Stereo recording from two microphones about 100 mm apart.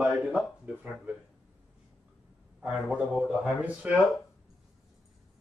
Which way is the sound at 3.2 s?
5° right (ahead or behind).